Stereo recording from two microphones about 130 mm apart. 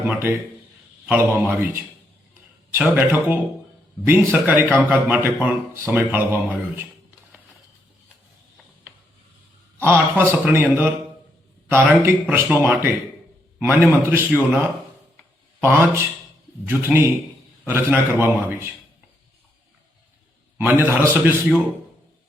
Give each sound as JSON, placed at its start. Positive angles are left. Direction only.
{"t": 1.0, "sound": "speech", "side_deg": -15}
{"t": 9.8, "sound": "a man's voice", "side_deg": -15}
{"t": 15.6, "sound": "a man's voice", "side_deg": -20}
{"t": 20.6, "sound": "speech", "side_deg": -15}